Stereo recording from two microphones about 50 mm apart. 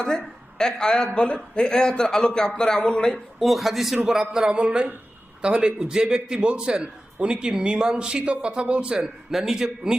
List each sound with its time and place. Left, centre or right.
0.6 s a man's voice: centre
3.4 s a man's voice: centre